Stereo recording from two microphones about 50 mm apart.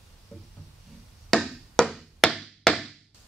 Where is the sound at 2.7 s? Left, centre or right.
Centre.